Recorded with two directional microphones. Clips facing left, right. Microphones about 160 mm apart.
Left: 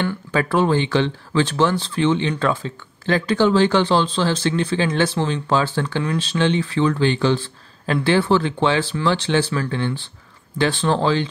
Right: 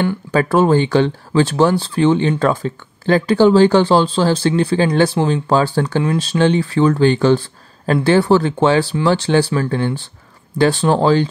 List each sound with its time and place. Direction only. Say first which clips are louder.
0.0 s speech: right 5 dB; 40° right (ahead or behind)